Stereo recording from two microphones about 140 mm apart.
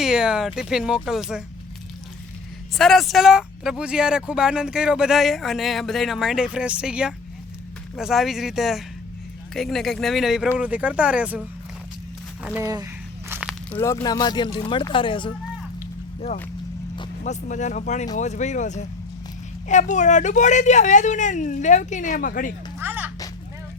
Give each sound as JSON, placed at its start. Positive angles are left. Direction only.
{"t": 0.0, "sound": "speech", "side_deg": -5}
{"t": 2.7, "sound": "speech", "side_deg": 0}
{"t": 12.6, "sound": "a sound", "side_deg": -25}
{"t": 13.7, "sound": "speech", "side_deg": 20}
{"t": 17.2, "sound": "speech", "side_deg": 60}
{"t": 22.8, "sound": "a sound", "side_deg": -15}